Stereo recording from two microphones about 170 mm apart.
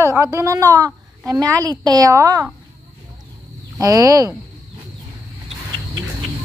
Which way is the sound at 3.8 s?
20° right (ahead or behind).